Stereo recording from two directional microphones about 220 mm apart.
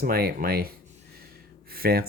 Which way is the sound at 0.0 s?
45° right (ahead or behind).